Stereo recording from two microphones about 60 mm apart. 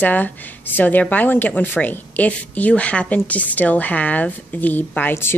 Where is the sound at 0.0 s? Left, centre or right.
Left.